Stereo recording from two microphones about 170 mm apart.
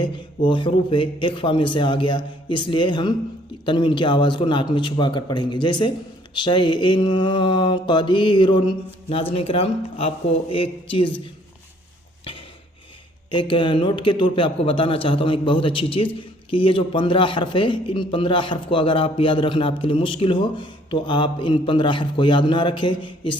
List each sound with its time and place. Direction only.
0.0 s a man's voice: 30° left (ahead or behind)
13.3 s a man's voice: 30° left (ahead or behind)